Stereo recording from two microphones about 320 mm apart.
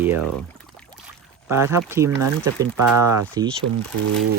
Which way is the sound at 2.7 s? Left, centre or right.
Right.